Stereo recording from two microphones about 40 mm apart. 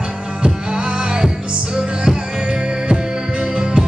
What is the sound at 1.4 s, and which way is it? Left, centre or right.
Music, right.